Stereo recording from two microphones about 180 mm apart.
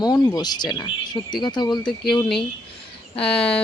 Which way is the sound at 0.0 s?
20° left (ahead or behind).